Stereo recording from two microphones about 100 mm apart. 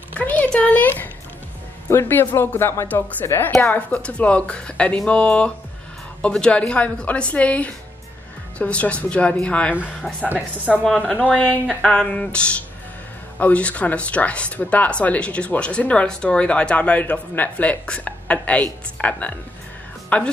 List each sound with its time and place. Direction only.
0.2 s a sound: 15° left (ahead or behind)
1.9 s speech: 25° left (ahead or behind)
10.2 s speech: 15° right (ahead or behind)
11.3 s speech: 10° left (ahead or behind)